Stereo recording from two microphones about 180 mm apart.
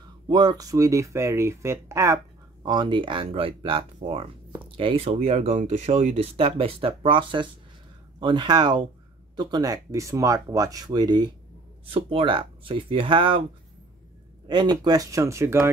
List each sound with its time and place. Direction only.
0.3 s speech: 20° right (ahead or behind)
2.6 s speech: 25° right (ahead or behind)
14.5 s speech: 25° right (ahead or behind)